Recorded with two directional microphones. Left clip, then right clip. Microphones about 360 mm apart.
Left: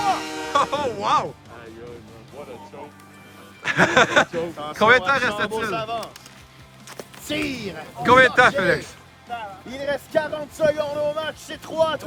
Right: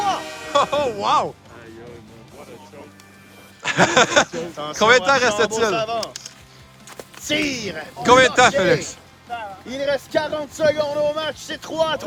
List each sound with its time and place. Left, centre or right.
0.5 s speech: centre
3.6 s speech: centre
4.5 s speech: right
4.8 s speech: centre
5.7 s speech: right
7.3 s speech: right
8.0 s speech: centre
9.6 s speech: right